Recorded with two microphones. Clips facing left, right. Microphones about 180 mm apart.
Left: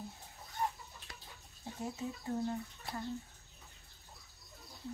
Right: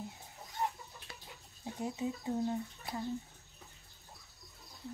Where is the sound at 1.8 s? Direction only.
15° right (ahead or behind).